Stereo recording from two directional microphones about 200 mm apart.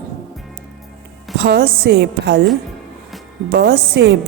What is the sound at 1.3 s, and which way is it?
A woman's voice, 50° right (ahead or behind).